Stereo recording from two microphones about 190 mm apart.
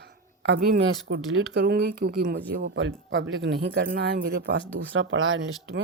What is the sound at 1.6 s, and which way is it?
Speech, 55° right (ahead or behind).